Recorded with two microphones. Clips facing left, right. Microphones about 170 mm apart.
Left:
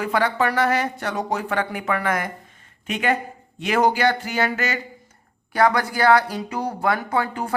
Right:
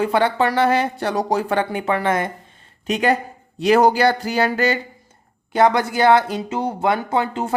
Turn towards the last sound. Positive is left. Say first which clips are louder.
# right 3 dB
turn(degrees=-25)  # may be behind; listen again after turning